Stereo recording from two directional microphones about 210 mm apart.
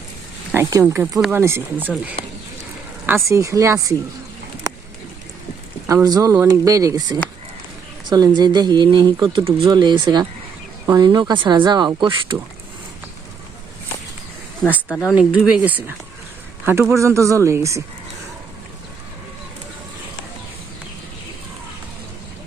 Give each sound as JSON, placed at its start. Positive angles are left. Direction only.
{"t": 0.5, "sound": "speech", "side_deg": -10}
{"t": 3.1, "sound": "speech", "side_deg": -15}
{"t": 5.9, "sound": "speech", "side_deg": -15}
{"t": 14.8, "sound": "speech", "side_deg": 10}
{"t": 15.1, "sound": "speech", "side_deg": -5}